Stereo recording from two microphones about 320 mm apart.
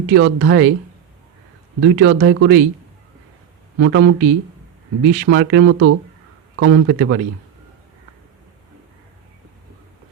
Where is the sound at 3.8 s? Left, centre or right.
Right.